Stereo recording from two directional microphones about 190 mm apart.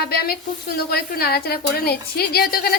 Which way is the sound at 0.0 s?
55° left (ahead or behind).